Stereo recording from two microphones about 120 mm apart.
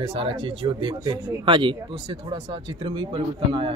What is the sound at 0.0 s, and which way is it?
Speech, 50° right (ahead or behind).